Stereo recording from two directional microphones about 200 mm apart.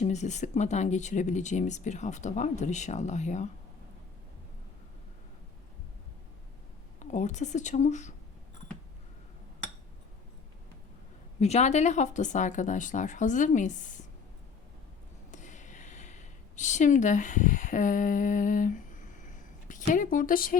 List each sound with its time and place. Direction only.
0.0 s speech: 35° left (ahead or behind)
7.0 s speech: 35° left (ahead or behind)
11.3 s speech: 35° left (ahead or behind)
15.3 s a sound: 35° left (ahead or behind)